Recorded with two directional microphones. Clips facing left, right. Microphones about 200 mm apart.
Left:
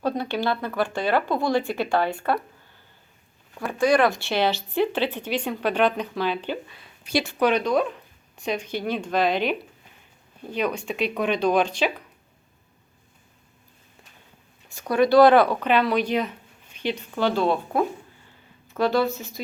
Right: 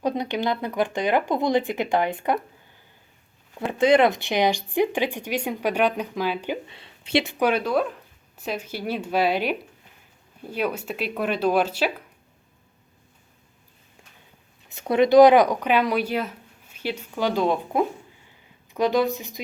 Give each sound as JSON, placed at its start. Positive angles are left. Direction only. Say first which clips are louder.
{"t": 0.0, "sound": "speech", "louder": "even", "side_deg": -15}
{"t": 3.6, "sound": "speech", "louder": "right 2 dB", "side_deg": -20}
{"t": 6.7, "sound": "speech", "louder": "right 3 dB", "side_deg": -25}
{"t": 14.7, "sound": "speech", "louder": "right 1 dB", "side_deg": -20}